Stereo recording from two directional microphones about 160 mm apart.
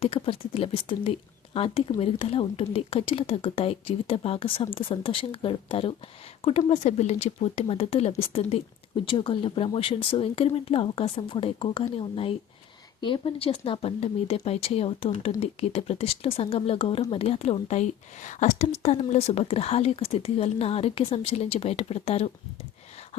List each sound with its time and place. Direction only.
0.0 s speech: 35° left (ahead or behind)